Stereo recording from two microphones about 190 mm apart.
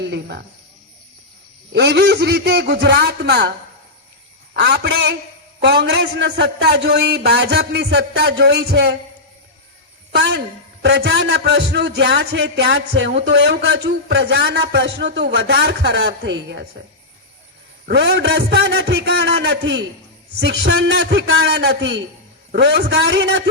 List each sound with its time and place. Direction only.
0.0 s speech: 65° right (ahead or behind)
1.7 s speech: 65° right (ahead or behind)
4.5 s speech: 60° right (ahead or behind)
10.1 s a woman's voice: 60° right (ahead or behind)
17.8 s speech: 60° right (ahead or behind)